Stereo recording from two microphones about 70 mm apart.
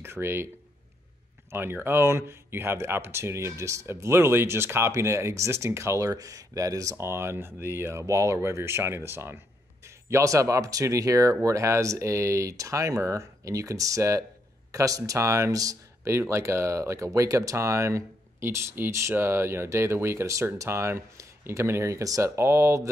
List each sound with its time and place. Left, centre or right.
0.0 s speech: right
1.5 s speech: right